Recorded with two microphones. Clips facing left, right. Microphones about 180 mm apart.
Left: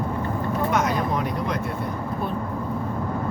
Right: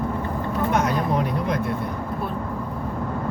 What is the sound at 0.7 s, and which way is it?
Speech, 55° right (ahead or behind).